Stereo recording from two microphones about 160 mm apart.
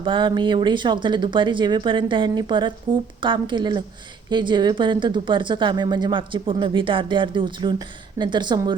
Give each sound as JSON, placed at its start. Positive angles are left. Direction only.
{"t": 0.0, "sound": "speech", "side_deg": -30}